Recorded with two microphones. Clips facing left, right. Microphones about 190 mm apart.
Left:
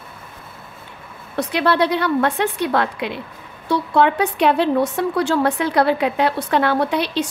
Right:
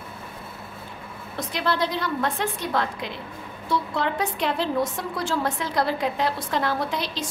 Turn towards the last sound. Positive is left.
turn(degrees=65)  # may be behind; listen again after turning